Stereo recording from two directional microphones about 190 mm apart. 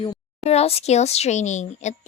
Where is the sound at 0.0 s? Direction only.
30° left (ahead or behind).